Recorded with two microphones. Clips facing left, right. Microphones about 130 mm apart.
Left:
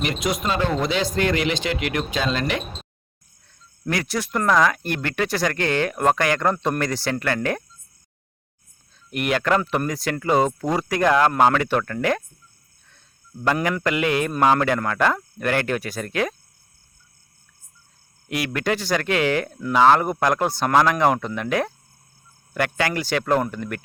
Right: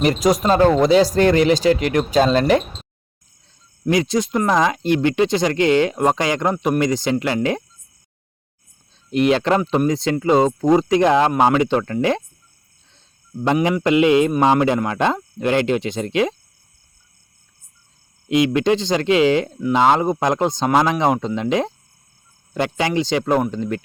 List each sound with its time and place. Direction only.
0.0 s speech: 40° right (ahead or behind)
3.8 s speech: 20° right (ahead or behind)
9.0 s speech: 25° right (ahead or behind)
13.4 s speech: 20° right (ahead or behind)
18.3 s speech: 20° right (ahead or behind)